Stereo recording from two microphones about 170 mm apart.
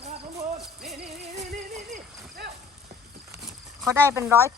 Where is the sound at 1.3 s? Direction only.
45° right (ahead or behind).